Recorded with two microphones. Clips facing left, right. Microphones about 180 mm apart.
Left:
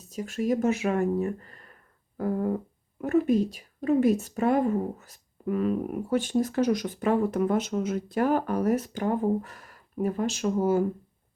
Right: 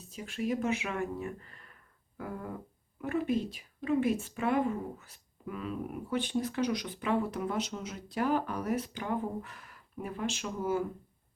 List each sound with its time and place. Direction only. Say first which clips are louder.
0.1 s a woman's voice: left 7 dB; 40° left (ahead or behind)